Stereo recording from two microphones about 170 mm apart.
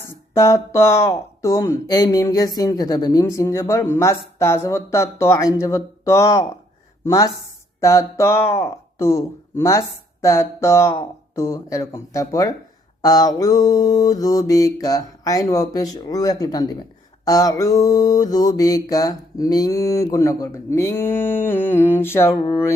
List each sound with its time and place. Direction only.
0.0 s speech: 15° left (ahead or behind)
7.1 s mantra: 20° left (ahead or behind)
7.8 s speech: 20° left (ahead or behind)
11.3 s mantra: 20° left (ahead or behind)